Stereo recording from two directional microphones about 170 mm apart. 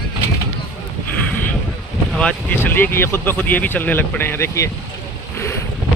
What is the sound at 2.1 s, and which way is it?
Speech, 10° left (ahead or behind).